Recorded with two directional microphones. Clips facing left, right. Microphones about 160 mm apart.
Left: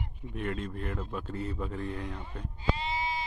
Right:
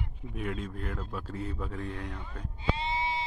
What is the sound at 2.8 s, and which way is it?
Bleat, 25° right (ahead or behind).